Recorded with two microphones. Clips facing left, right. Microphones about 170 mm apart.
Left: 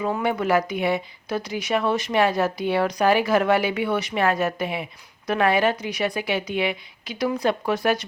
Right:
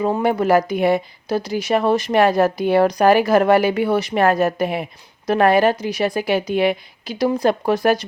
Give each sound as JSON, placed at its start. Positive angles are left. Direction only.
{"t": 0.0, "sound": "speech", "side_deg": -40}